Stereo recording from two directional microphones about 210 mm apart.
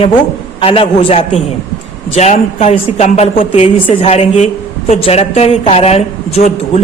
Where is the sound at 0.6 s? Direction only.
25° left (ahead or behind).